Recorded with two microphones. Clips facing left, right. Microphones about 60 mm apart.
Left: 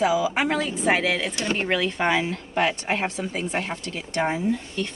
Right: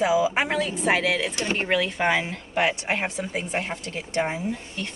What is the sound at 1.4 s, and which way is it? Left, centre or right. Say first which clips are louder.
Speech: left 1 dB; right.